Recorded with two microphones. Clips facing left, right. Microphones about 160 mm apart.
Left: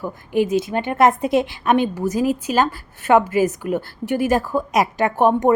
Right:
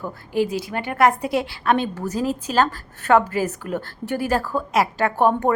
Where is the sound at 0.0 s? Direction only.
20° left (ahead or behind).